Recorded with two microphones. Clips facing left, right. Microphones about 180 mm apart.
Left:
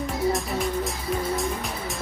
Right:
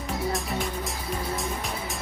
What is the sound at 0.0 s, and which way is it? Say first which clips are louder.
Music: left 4 dB; centre (ahead or behind).